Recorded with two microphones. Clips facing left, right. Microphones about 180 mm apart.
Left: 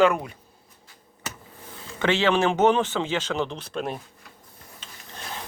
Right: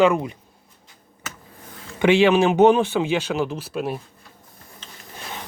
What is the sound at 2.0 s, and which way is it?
Speech, 15° right (ahead or behind).